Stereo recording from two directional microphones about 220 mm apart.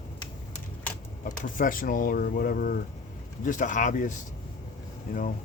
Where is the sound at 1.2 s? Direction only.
35° left (ahead or behind).